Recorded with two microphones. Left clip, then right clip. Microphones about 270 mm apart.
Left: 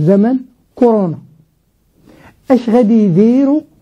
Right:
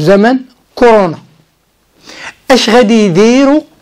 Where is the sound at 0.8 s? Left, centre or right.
Centre.